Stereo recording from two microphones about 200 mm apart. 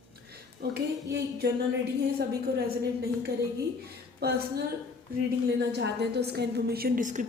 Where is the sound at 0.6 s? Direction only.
55° right (ahead or behind).